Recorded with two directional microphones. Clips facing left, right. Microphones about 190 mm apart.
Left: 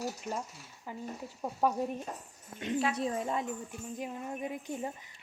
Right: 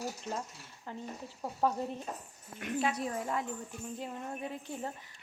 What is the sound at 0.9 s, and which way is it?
Speech, 10° left (ahead or behind).